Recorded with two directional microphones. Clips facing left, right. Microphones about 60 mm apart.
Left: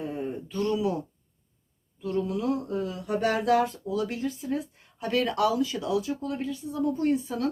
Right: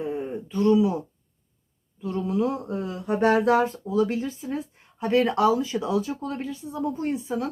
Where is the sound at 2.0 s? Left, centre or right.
Right.